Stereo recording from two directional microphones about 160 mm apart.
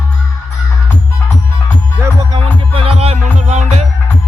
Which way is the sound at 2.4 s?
35° right (ahead or behind).